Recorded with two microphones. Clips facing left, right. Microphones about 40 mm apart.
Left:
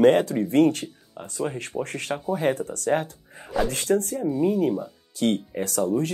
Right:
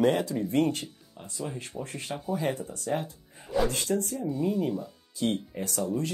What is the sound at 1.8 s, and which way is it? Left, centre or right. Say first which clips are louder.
Speech: left 4 dB; left.